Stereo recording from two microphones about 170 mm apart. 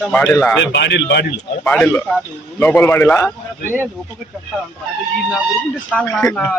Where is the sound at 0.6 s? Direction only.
90° left.